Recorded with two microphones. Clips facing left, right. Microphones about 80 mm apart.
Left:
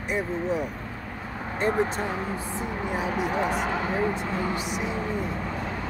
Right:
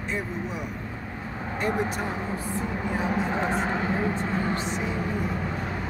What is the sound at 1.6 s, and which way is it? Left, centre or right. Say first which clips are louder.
Speech: left 2 dB; left.